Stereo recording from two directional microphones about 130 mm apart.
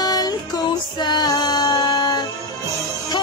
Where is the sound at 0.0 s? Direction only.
30° left (ahead or behind).